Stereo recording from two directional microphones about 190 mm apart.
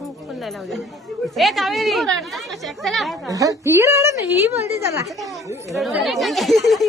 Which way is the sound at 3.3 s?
15° right (ahead or behind).